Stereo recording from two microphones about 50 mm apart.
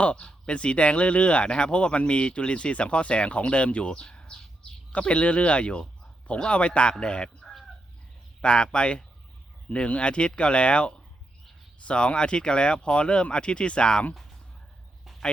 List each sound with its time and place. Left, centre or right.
0.0 s speech: left
4.1 s bird: centre
4.9 s speech: left
14.1 s a sound: centre